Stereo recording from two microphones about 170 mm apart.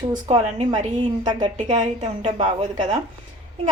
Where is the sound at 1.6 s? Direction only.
40° right (ahead or behind).